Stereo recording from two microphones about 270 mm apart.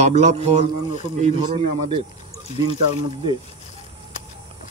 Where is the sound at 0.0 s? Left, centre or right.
Right.